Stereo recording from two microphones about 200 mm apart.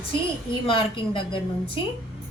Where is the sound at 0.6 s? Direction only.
25° left (ahead or behind).